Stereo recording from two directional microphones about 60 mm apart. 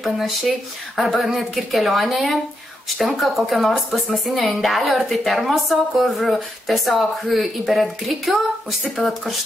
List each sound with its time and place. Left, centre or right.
0.9 s speech: centre